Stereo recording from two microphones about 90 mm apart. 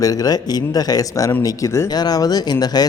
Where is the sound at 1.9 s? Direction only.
45° left (ahead or behind).